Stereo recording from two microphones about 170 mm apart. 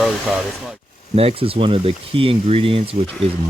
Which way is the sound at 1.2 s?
35° right (ahead or behind).